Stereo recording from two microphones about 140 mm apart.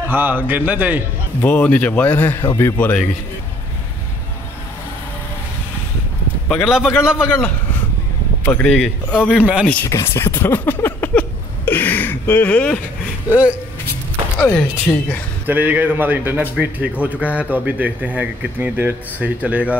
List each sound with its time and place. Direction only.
0.1 s a man's voice: 15° right (ahead or behind)
1.4 s speech: 10° left (ahead or behind)
6.5 s a man's voice: 5° right (ahead or behind)
7.2 s speech: 10° left (ahead or behind)
9.4 s a man's voice: 5° right (ahead or behind)
9.8 s speech: 20° left (ahead or behind)
13.3 s a man's voice: 10° right (ahead or behind)
14.4 s speech: 15° left (ahead or behind)
15.4 s a man's voice: 10° right (ahead or behind)